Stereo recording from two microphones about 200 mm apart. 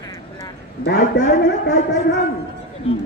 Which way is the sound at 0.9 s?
60° left (ahead or behind).